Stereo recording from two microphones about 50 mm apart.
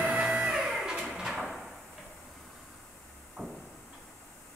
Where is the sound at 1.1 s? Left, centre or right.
Centre.